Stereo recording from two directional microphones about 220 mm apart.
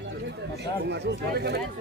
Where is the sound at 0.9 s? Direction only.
50° right (ahead or behind).